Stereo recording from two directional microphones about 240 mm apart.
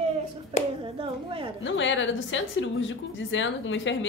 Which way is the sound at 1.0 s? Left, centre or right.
Right.